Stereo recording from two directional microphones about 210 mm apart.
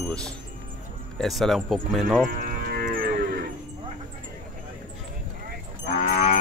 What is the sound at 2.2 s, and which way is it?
Moo, 40° right (ahead or behind).